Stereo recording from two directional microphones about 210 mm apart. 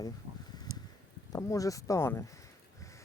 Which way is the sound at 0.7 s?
15° right (ahead or behind).